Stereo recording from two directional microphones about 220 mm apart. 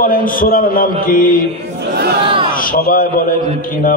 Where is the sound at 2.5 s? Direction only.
40° left (ahead or behind).